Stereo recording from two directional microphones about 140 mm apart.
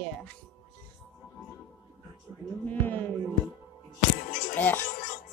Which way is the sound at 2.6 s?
15° left (ahead or behind).